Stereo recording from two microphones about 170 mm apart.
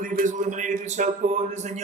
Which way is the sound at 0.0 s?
55° right (ahead or behind).